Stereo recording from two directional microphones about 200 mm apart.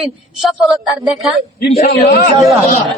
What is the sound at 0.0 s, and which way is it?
A man's voice, centre (ahead or behind).